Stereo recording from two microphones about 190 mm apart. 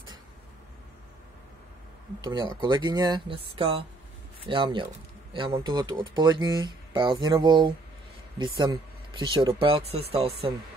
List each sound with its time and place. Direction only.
2.2 s speech: 20° right (ahead or behind)